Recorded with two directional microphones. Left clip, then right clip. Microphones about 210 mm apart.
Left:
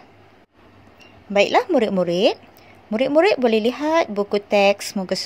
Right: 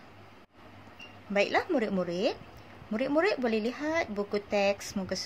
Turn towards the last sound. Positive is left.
turn(degrees=30)  # may be behind; listen again after turning